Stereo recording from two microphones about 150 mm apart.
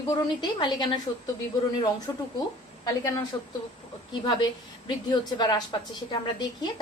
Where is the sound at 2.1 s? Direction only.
25° left (ahead or behind).